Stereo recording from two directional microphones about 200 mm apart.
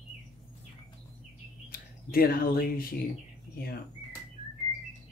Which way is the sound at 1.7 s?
45° left (ahead or behind).